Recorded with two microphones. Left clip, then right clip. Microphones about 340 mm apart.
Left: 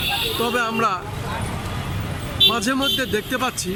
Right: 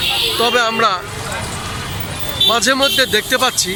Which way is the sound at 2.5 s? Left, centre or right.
Centre.